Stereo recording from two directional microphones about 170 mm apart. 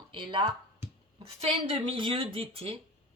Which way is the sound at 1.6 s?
30° right (ahead or behind).